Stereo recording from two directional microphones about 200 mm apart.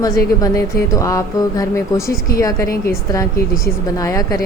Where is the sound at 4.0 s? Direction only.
15° left (ahead or behind).